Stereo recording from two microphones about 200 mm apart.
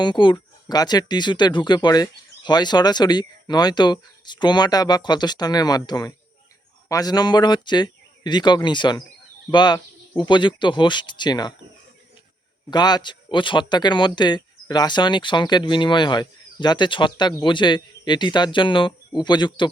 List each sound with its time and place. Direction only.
0.0 s speech: 25° left (ahead or behind)
12.7 s speech: 20° left (ahead or behind)